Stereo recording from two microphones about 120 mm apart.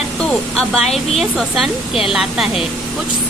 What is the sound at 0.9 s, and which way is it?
Speech, centre (ahead or behind).